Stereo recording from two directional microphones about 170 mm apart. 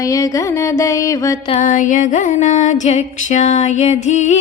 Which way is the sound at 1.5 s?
50° left (ahead or behind).